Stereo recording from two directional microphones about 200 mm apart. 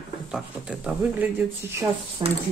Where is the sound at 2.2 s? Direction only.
20° right (ahead or behind).